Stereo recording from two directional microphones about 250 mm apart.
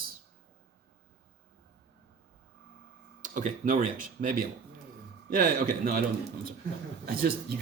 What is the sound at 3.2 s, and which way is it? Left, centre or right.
Speech, right.